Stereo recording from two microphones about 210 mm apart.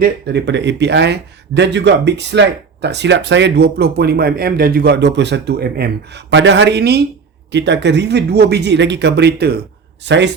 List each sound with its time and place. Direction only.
0.0 s speech: 50° right (ahead or behind)